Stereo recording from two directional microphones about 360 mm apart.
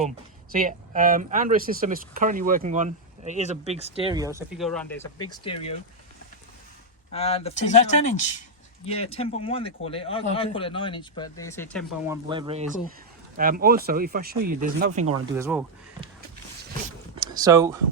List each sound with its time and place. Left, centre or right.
0.5 s speech: right; by 5.7 s centre
7.1 s speech: centre
12.3 s speech: centre
15.1 s speech: centre
17.2 s speech: centre